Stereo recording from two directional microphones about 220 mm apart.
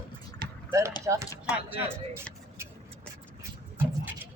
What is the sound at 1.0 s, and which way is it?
Speech, 15° right (ahead or behind).